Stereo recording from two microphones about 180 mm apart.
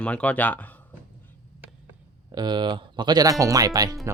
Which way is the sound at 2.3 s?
25° right (ahead or behind).